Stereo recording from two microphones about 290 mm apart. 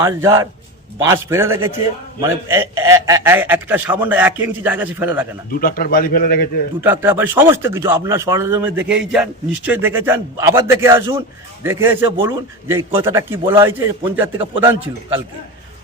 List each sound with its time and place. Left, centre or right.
0.0 s a man's voice: centre
5.5 s a man's voice: left
6.8 s a man's voice: centre